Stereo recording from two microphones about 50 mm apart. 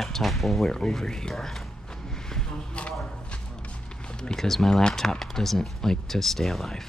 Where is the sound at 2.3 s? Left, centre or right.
Centre.